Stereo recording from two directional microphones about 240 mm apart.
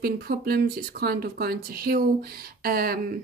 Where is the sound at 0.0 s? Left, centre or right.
Right.